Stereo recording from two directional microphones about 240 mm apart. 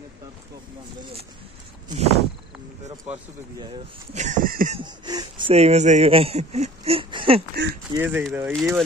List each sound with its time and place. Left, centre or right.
1.9 s speech: right
4.1 s speech: right
4.7 s speech: centre
7.9 s speech: centre